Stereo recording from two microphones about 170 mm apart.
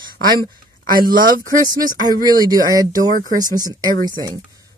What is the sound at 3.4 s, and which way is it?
Speech, 20° right (ahead or behind).